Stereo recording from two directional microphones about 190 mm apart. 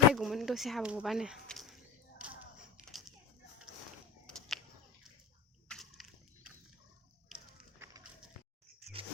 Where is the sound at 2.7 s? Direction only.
Centre (ahead or behind).